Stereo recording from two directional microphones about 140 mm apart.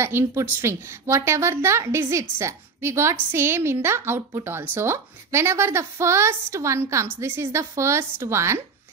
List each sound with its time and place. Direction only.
0.0 s a woman's voice: 20° right (ahead or behind)